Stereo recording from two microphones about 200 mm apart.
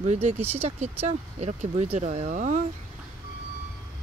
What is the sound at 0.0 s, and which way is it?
Speech, 35° right (ahead or behind).